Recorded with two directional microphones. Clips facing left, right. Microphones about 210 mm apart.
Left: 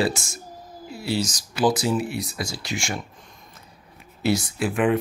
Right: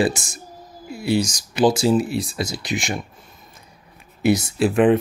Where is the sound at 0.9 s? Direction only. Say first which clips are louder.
Right 5 dB; 15° right (ahead or behind).